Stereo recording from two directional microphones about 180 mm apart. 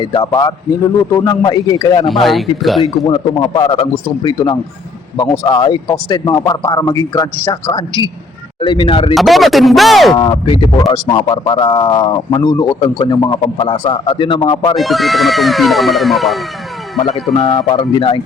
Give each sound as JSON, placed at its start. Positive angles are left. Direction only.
{"t": 0.0, "sound": "speech", "side_deg": 25}
{"t": 2.0, "sound": "speech", "side_deg": 0}
{"t": 2.8, "sound": "speech", "side_deg": 25}
{"t": 9.1, "sound": "speech", "side_deg": 0}
{"t": 10.2, "sound": "speech", "side_deg": 25}
{"t": 14.8, "sound": "speech", "side_deg": 0}
{"t": 17.0, "sound": "speech", "side_deg": 35}